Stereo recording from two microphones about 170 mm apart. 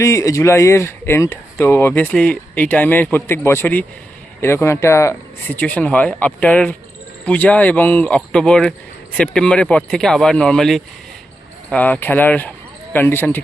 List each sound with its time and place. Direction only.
0.0 s speech: 20° left (ahead or behind)